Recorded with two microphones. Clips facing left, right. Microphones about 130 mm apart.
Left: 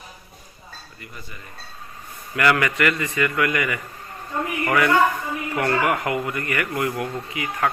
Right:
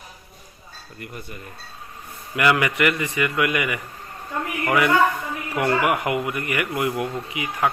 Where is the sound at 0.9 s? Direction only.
55° right (ahead or behind).